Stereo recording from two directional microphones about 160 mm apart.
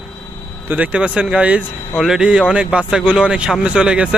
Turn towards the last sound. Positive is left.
turn(degrees=-5)  # may be behind; listen again after turning